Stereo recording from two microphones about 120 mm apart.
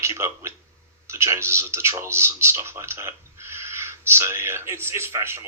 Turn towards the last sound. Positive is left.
turn(degrees=-20)  # may be behind; listen again after turning